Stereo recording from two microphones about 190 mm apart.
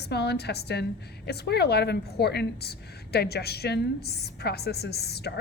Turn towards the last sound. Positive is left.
turn(degrees=60)  # may be behind; listen again after turning